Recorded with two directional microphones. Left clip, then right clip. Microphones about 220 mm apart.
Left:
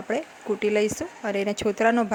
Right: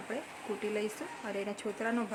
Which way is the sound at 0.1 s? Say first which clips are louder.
Left 12 dB; 35° left (ahead or behind).